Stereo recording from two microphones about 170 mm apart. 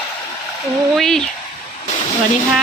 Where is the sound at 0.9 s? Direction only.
Centre (ahead or behind).